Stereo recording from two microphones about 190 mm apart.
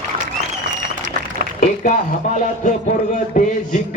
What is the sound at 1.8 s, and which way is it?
Music, 40° left (ahead or behind).